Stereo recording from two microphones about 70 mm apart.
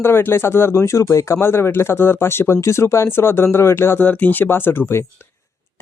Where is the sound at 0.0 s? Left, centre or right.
Left.